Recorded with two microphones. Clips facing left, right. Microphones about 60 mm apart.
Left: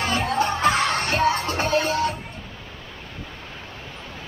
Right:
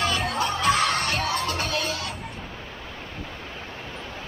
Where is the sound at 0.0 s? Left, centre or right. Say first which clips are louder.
Left 3 dB; left.